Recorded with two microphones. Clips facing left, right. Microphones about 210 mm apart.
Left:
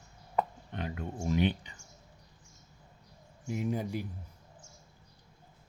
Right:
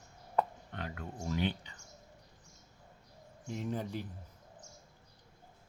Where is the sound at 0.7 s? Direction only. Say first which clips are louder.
Left 5 dB; 20° left (ahead or behind).